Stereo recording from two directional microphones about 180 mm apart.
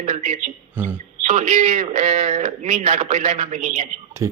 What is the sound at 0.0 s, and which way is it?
Speech, 45° right (ahead or behind).